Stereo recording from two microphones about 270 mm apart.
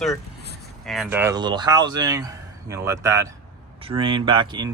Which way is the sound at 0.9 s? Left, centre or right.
Centre.